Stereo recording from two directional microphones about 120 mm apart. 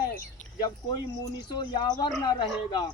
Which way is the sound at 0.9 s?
35° left (ahead or behind).